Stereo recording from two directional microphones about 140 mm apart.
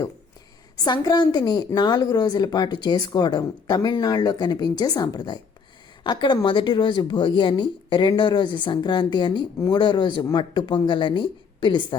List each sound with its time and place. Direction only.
0.9 s a woman's voice: 30° left (ahead or behind)